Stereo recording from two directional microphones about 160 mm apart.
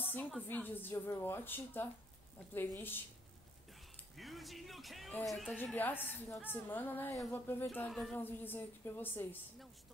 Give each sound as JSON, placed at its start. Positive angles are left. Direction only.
{"t": 0.0, "sound": "a sound", "side_deg": 10}
{"t": 0.4, "sound": "a woman's voice", "side_deg": 10}
{"t": 4.2, "sound": "speech", "side_deg": 0}
{"t": 5.6, "sound": "a woman's voice", "side_deg": 10}
{"t": 7.9, "sound": "speech", "side_deg": 0}
{"t": 8.2, "sound": "a woman's voice", "side_deg": 15}